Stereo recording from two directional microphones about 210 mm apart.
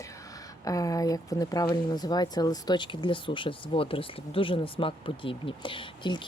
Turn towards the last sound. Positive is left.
turn(degrees=20)  # may be behind; listen again after turning